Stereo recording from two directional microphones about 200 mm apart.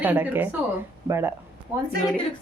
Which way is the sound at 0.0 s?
10° right (ahead or behind).